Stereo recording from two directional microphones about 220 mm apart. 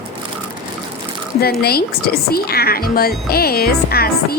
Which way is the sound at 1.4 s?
45° left (ahead or behind).